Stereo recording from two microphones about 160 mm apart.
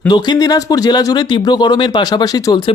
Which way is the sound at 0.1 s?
25° left (ahead or behind).